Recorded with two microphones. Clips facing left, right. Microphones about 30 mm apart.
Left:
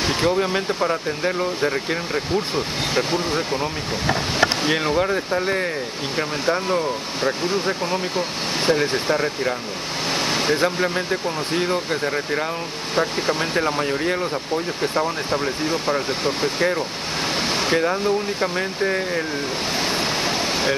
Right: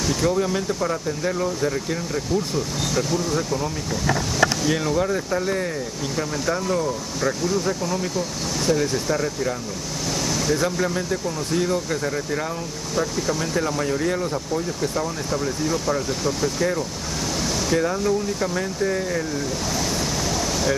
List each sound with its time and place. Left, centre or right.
0.0 s vehicle: left
0.3 s speech: left
17.4 s a sound: left
17.8 s speech: left
19.8 s pink noise: left